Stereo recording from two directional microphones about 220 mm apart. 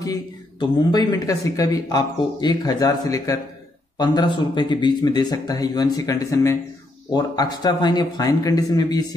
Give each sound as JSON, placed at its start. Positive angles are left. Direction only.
{"t": 0.0, "sound": "speech", "side_deg": 15}